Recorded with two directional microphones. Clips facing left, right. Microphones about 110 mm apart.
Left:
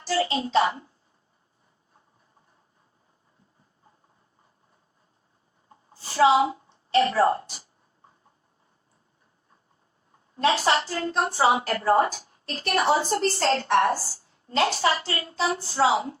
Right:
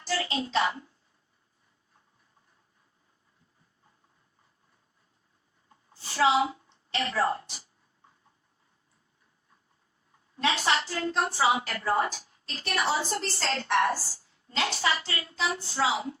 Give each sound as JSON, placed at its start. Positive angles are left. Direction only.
{"t": 0.0, "sound": "a woman's voice", "side_deg": 30}
{"t": 5.6, "sound": "a sound", "side_deg": 35}
{"t": 6.7, "sound": "a woman's voice", "side_deg": 35}
{"t": 10.1, "sound": "a woman's voice", "side_deg": 35}
{"t": 13.1, "sound": "a woman's voice", "side_deg": 45}
{"t": 13.5, "sound": "a woman's voice", "side_deg": 30}